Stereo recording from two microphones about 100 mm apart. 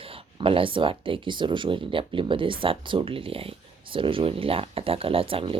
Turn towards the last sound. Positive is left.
turn(degrees=-65)  # may be behind; listen again after turning